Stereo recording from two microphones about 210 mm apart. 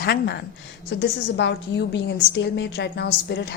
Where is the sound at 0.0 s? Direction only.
50° left (ahead or behind).